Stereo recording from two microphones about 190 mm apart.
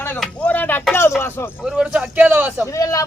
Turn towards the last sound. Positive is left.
turn(degrees=15)  # may be behind; listen again after turning